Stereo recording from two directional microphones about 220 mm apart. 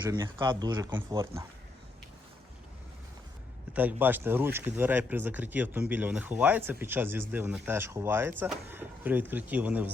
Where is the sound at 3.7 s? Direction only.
10° right (ahead or behind).